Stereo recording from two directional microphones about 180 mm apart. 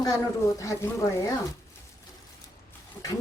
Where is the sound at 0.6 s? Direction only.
15° left (ahead or behind).